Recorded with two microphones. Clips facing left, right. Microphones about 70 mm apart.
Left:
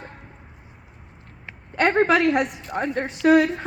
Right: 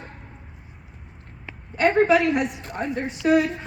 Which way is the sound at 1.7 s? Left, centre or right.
Left.